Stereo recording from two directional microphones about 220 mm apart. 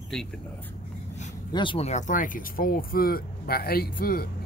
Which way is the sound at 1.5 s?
20° left (ahead or behind).